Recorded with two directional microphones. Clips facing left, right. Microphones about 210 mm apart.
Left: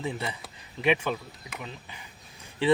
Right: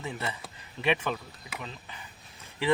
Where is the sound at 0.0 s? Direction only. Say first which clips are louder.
Left 3 dB; 15° left (ahead or behind).